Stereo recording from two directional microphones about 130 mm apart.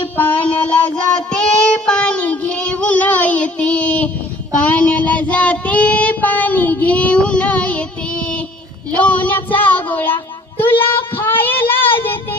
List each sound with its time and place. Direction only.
0.2 s child singing: 10° left (ahead or behind)